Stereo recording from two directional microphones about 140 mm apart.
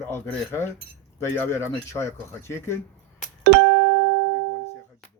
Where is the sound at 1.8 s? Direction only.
20° left (ahead or behind).